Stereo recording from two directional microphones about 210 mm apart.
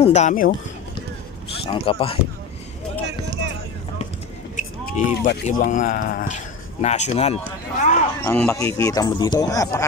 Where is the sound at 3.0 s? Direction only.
55° right (ahead or behind).